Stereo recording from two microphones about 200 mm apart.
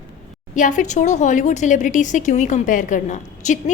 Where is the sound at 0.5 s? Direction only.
40° left (ahead or behind).